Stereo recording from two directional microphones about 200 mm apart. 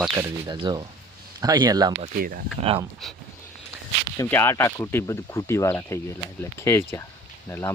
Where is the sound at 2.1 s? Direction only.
45° right (ahead or behind).